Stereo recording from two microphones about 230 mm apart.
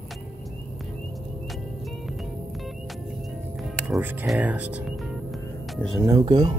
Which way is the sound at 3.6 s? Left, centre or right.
Centre.